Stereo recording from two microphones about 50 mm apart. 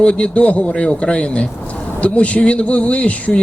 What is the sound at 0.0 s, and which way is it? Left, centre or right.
Speech, left.